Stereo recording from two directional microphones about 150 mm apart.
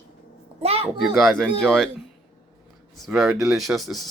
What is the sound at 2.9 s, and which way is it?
Speech, centre (ahead or behind).